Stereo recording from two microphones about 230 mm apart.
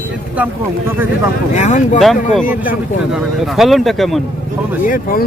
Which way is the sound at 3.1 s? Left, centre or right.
Centre.